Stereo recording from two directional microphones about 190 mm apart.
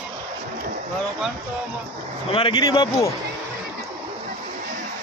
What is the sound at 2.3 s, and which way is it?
Speech, 30° left (ahead or behind).